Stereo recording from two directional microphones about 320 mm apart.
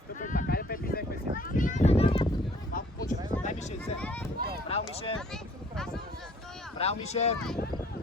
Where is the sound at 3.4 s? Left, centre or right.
Left.